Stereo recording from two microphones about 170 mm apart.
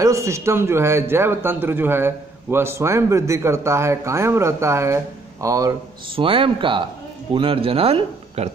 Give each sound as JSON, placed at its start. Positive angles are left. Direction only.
{"t": 0.0, "sound": "a man's voice", "side_deg": -15}
{"t": 6.1, "sound": "speech", "side_deg": -30}